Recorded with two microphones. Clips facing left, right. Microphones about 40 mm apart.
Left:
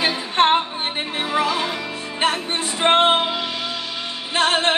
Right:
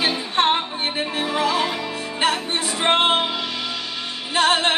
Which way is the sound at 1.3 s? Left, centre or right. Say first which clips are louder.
Left 1 dB; left.